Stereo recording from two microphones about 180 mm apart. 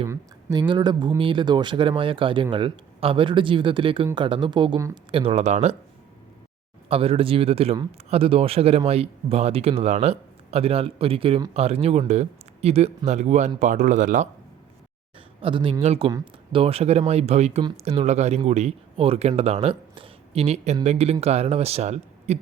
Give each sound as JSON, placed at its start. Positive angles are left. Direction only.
{"t": 0.1, "sound": "a sound", "side_deg": -15}
{"t": 0.7, "sound": "speech", "side_deg": -25}
{"t": 6.8, "sound": "speech", "side_deg": -30}
{"t": 15.4, "sound": "speech", "side_deg": -30}